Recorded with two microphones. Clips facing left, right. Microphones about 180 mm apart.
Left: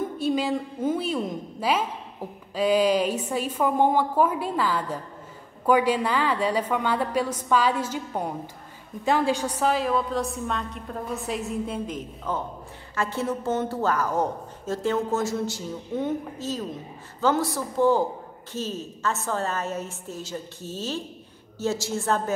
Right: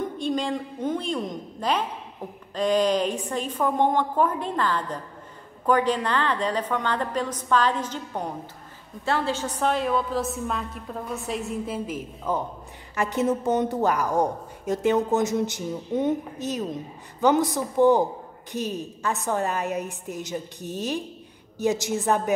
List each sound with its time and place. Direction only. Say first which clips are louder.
0.0 s a woman's voice: left 1 dB; 5° left (ahead or behind); by 22.3 s 15° right (ahead or behind)